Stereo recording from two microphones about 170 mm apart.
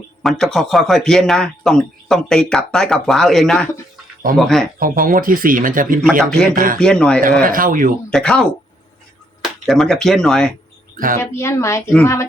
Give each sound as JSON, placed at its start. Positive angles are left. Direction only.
{"t": 0.2, "sound": "a man's voice", "side_deg": 0}
{"t": 4.8, "sound": "speech", "side_deg": -55}
{"t": 6.0, "sound": "a man's voice", "side_deg": 0}
{"t": 6.5, "sound": "speech", "side_deg": -55}
{"t": 6.7, "sound": "a man's voice", "side_deg": 5}
{"t": 7.4, "sound": "speech", "side_deg": -55}
{"t": 8.1, "sound": "a man's voice", "side_deg": 5}
{"t": 9.4, "sound": "speech", "side_deg": 0}
{"t": 10.9, "sound": "speech", "side_deg": -55}
{"t": 11.2, "sound": "speech", "side_deg": 15}